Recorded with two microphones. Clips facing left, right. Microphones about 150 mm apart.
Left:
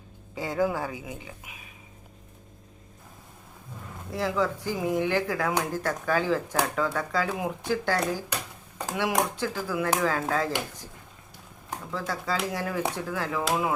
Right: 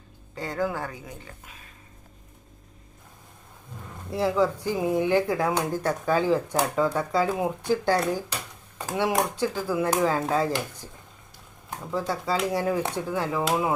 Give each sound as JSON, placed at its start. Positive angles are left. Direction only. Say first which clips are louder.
{"t": 0.3, "sound": "speech", "louder": "left 2 dB", "side_deg": 5}
{"t": 4.1, "sound": "speech", "louder": "right 4 dB", "side_deg": -25}
{"t": 11.9, "sound": "speech", "louder": "right 4 dB", "side_deg": -25}